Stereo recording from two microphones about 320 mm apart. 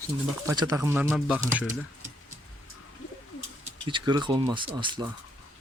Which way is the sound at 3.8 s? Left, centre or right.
Centre.